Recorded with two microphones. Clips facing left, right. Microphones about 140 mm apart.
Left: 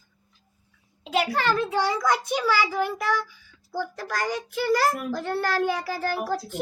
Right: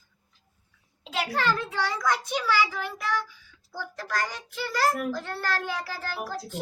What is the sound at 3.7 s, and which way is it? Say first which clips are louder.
A child's voice: left 3 dB; 10° left (ahead or behind).